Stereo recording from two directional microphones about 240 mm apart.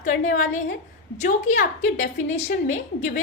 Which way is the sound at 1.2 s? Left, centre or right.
Left.